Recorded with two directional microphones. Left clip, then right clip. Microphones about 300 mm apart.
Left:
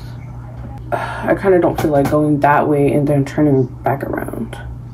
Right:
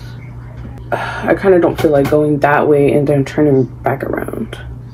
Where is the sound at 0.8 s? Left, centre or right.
Centre.